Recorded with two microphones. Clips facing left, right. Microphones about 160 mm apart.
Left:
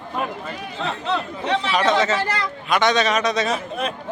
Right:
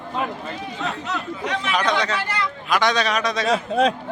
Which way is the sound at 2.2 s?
40° left (ahead or behind).